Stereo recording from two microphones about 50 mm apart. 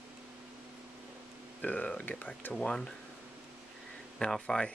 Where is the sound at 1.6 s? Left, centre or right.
Left.